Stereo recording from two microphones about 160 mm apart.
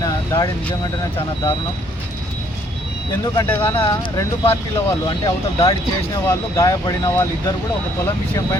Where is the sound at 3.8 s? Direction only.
25° left (ahead or behind).